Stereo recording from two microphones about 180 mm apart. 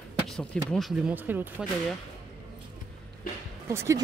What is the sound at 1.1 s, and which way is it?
Speech, 10° right (ahead or behind).